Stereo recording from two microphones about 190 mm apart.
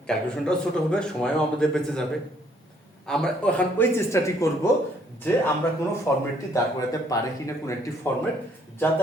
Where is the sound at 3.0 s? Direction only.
5° left (ahead or behind).